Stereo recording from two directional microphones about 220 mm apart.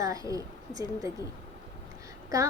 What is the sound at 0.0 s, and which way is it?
A woman's voice, 15° right (ahead or behind).